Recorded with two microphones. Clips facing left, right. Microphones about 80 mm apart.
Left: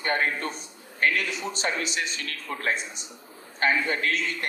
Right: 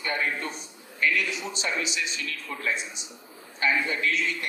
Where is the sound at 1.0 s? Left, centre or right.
Left.